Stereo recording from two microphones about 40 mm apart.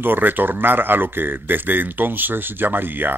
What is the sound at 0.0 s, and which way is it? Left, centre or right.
Speech, right.